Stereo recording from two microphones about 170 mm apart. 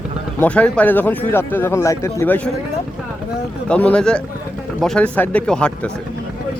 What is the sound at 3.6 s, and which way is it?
Speech, 5° left (ahead or behind).